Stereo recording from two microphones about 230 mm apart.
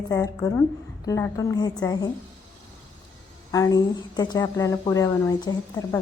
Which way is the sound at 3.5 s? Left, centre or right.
Centre.